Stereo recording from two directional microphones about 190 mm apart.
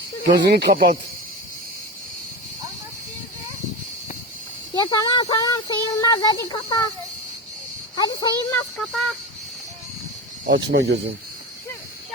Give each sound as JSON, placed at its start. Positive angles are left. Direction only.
{"t": 0.4, "sound": "speech", "side_deg": -55}
{"t": 4.7, "sound": "speech", "side_deg": 20}
{"t": 7.9, "sound": "speech", "side_deg": 20}
{"t": 8.4, "sound": "a sound", "side_deg": 5}
{"t": 10.5, "sound": "speech", "side_deg": -65}